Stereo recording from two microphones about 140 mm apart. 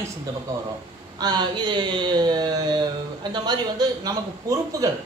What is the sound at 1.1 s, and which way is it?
Speech, 30° right (ahead or behind).